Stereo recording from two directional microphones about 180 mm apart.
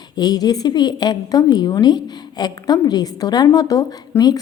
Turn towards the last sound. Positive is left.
turn(degrees=20)  # may be behind; listen again after turning